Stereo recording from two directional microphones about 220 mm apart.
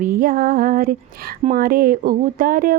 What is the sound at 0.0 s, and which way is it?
Speech, 40° right (ahead or behind).